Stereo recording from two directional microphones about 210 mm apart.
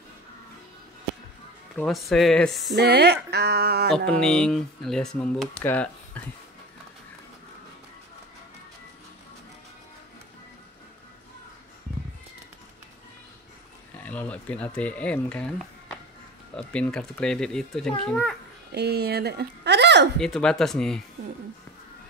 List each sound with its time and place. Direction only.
1.8 s speech: centre (ahead or behind)
2.7 s a sound: 50° right (ahead or behind)
3.9 s speech: 5° left (ahead or behind)
13.9 s speech: 5° left (ahead or behind)
16.5 s speech: 5° left (ahead or behind)
18.7 s speech: 50° right (ahead or behind)
20.2 s speech: 5° left (ahead or behind)